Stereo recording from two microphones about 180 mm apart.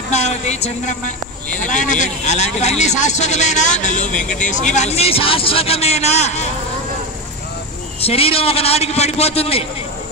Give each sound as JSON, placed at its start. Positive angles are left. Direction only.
{"t": 0.1, "sound": "a woman's voice", "side_deg": 40}
{"t": 8.0, "sound": "a man's voice", "side_deg": 35}